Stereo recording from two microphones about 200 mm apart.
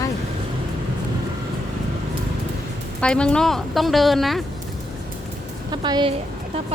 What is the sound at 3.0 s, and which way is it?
A woman's voice, 5° left (ahead or behind).